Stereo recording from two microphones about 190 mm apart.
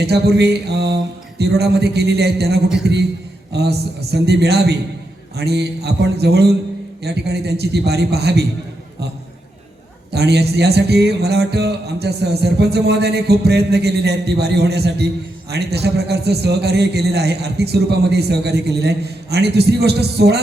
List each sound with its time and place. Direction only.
0.0 s speech: 60° right (ahead or behind)
10.1 s speech: 60° right (ahead or behind)